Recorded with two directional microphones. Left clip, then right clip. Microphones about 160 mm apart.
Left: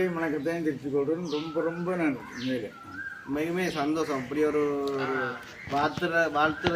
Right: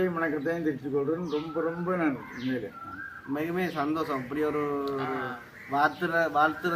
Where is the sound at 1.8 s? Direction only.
15° left (ahead or behind).